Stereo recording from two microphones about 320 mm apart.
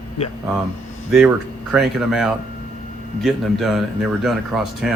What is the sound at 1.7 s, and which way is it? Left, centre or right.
Speech, centre.